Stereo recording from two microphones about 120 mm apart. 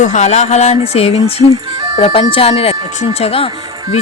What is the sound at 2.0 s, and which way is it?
Music, 60° left (ahead or behind).